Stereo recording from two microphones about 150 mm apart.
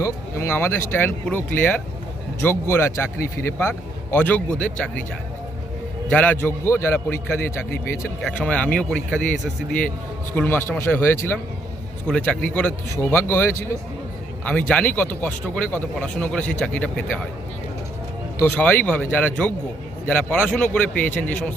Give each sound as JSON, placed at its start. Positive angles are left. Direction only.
{"t": 0.0, "sound": "speech", "side_deg": 15}
{"t": 6.1, "sound": "speech", "side_deg": 10}
{"t": 10.3, "sound": "speech", "side_deg": 15}
{"t": 18.3, "sound": "speech", "side_deg": 10}